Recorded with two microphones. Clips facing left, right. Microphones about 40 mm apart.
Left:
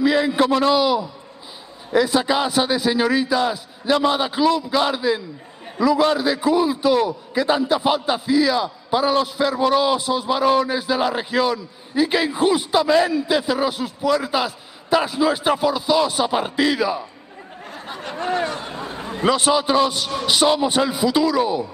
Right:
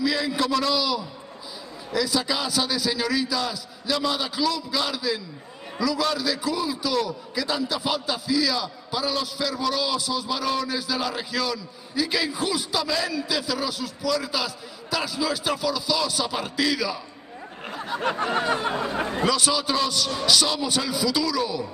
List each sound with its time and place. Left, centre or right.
0.0 s a man's voice: left
18.5 s speech: right
19.2 s a man's voice: left